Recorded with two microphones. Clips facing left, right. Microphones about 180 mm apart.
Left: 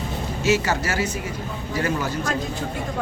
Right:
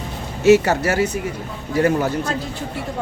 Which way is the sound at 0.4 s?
60° right (ahead or behind).